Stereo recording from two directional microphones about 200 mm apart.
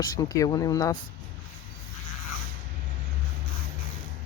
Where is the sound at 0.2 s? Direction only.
20° left (ahead or behind).